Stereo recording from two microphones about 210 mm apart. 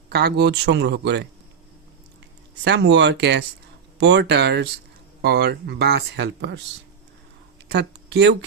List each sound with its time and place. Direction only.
0.1 s speech: 50° right (ahead or behind)
2.6 s speech: 55° right (ahead or behind)
7.7 s speech: 55° right (ahead or behind)